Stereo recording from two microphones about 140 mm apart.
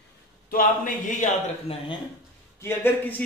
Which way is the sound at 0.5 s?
80° left.